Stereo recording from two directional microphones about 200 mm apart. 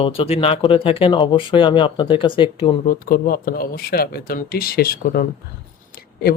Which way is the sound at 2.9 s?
45° left (ahead or behind).